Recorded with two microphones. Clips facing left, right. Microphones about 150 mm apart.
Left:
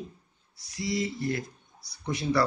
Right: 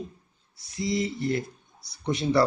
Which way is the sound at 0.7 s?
25° right (ahead or behind).